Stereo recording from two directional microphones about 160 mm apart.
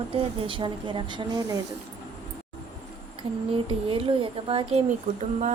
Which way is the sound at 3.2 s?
40° right (ahead or behind).